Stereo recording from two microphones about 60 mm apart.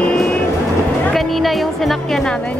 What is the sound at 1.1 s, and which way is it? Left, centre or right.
Speech, centre.